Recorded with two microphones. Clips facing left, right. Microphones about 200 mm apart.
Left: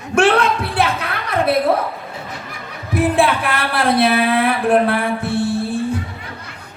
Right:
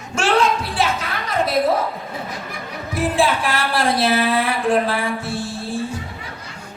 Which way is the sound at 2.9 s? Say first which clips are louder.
Left 3 dB; 60° left (ahead or behind).